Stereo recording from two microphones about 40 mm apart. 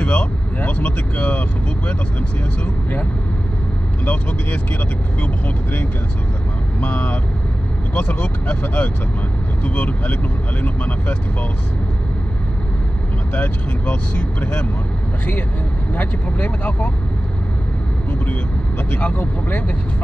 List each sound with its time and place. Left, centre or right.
0.0 s speech: left
4.0 s speech: left
7.9 s speech: left
13.3 s speech: left
16.0 s speech: left
18.9 s speech: left